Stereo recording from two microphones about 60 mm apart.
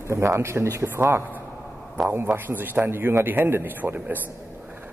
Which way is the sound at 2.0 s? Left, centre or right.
Right.